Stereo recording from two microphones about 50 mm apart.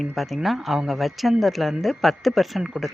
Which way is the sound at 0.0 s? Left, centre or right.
Centre.